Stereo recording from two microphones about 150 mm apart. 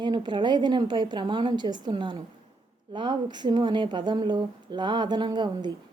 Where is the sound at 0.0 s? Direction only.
30° right (ahead or behind).